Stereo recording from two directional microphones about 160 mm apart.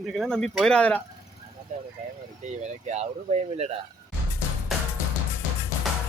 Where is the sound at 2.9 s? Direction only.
45° right (ahead or behind).